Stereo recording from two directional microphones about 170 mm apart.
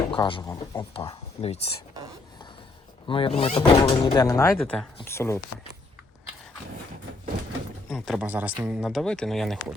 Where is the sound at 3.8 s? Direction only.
20° left (ahead or behind).